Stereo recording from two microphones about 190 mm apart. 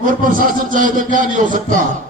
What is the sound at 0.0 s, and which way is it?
A man's voice, 45° right (ahead or behind).